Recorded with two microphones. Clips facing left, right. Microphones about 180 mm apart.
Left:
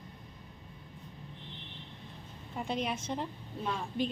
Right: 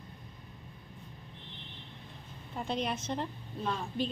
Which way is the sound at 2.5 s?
10° left (ahead or behind).